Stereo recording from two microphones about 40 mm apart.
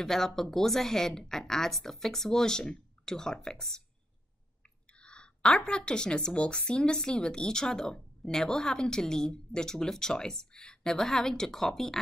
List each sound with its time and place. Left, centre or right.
0.0 s a woman's voice: centre
4.9 s speech: left
6.3 s a woman's voice: left; by 12.0 s centre